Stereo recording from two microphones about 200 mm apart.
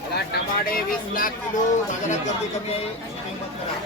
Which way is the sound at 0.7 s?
45° left (ahead or behind).